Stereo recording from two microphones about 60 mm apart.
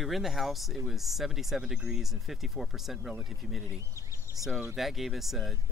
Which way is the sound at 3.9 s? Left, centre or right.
Left.